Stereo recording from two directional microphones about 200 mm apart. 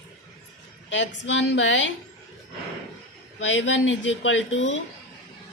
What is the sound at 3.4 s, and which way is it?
Speech, 70° left (ahead or behind).